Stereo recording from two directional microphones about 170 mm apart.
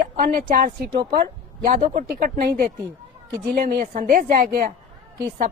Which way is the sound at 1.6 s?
50° right (ahead or behind).